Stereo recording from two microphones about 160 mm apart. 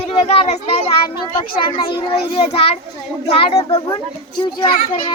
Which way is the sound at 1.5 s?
30° left (ahead or behind).